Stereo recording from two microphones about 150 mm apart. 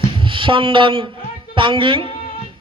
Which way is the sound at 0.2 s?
35° right (ahead or behind).